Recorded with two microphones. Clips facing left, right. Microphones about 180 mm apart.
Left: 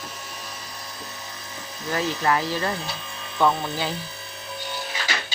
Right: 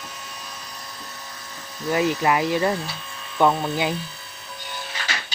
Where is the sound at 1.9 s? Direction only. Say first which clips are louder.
Right 3 dB; 15° right (ahead or behind).